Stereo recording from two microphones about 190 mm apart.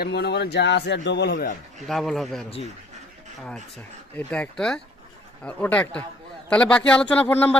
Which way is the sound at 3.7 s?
5° left (ahead or behind).